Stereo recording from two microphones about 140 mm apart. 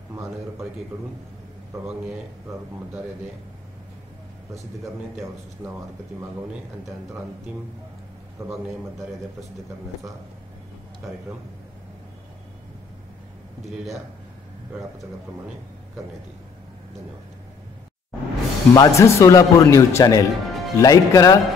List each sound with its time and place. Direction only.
8.4 s a man's voice: 20° right (ahead or behind)
18.7 s speech: 20° left (ahead or behind)